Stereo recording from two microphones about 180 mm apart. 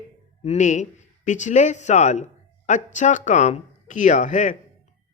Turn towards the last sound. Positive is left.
turn(degrees=45)  # may be behind; listen again after turning